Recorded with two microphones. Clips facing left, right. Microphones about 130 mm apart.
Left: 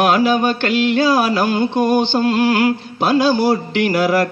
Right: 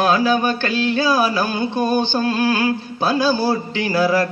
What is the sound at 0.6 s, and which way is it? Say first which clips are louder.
A man's voice: left 4 dB; 70° left (ahead or behind).